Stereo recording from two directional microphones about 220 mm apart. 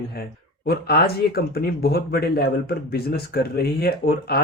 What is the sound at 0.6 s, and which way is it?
Speech, 45° left (ahead or behind).